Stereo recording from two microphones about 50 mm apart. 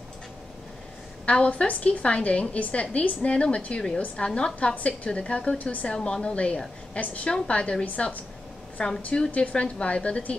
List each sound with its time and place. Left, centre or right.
1.2 s a woman's voice: left
5.6 s a woman's voice: left
5.9 s a woman's voice: centre
6.2 s a woman's voice: left
8.9 s a woman's voice: centre